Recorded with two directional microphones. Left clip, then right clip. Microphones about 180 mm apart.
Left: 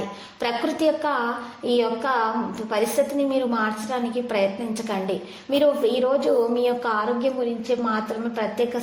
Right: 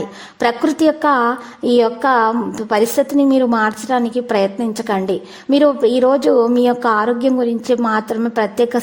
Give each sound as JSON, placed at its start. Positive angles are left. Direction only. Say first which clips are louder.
{"t": 0.3, "sound": "a woman's voice", "louder": "right 9 dB", "side_deg": -50}